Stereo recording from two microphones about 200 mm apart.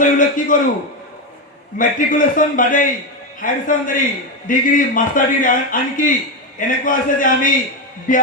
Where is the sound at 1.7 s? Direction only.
40° left (ahead or behind).